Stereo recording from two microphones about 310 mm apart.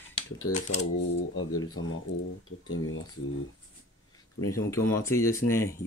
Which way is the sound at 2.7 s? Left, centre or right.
Left.